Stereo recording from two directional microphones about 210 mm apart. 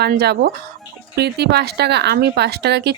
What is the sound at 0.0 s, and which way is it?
A woman's voice, 50° right (ahead or behind).